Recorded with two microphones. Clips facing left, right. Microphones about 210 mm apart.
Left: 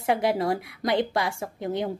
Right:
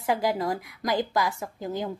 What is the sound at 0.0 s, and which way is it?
A woman's voice, 25° left (ahead or behind).